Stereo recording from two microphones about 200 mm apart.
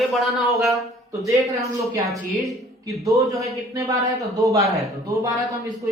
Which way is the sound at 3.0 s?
15° right (ahead or behind).